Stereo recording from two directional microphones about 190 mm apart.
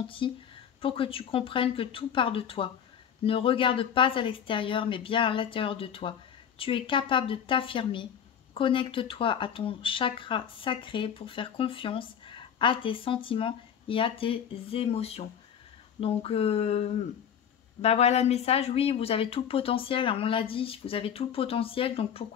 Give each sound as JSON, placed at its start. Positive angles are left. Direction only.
{"t": 0.0, "sound": "speech", "side_deg": 30}